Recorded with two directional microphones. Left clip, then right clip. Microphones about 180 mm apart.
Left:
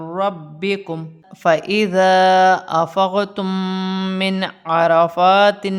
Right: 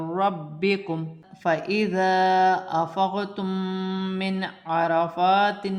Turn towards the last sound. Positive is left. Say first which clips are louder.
# left 8 dB
turn(degrees=50)  # may be behind; listen again after turning